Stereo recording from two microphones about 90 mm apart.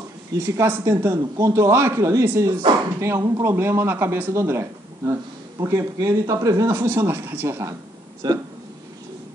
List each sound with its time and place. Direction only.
0.3 s speech: 35° right (ahead or behind)
3.4 s speech: 30° right (ahead or behind)
8.2 s speech: 50° right (ahead or behind)